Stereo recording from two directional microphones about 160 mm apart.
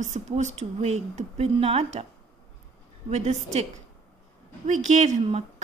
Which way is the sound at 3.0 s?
45° right (ahead or behind).